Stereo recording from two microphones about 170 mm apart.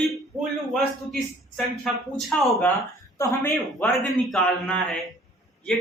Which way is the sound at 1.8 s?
5° left (ahead or behind).